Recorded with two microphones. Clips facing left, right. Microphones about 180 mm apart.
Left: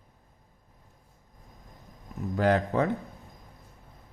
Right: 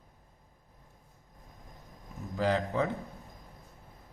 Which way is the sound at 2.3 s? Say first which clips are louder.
Left 4 dB; 60° left (ahead or behind).